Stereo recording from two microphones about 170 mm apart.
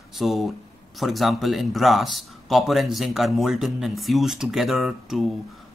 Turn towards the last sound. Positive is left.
turn(degrees=0)  # may be behind; listen again after turning